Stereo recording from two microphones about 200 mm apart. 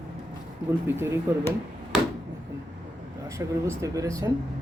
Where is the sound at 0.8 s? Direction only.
10° right (ahead or behind).